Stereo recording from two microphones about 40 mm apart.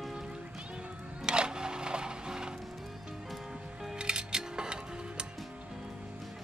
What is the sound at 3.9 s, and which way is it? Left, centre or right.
Music, right.